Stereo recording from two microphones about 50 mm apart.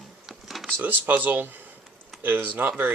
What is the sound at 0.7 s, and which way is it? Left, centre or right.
Speech, right.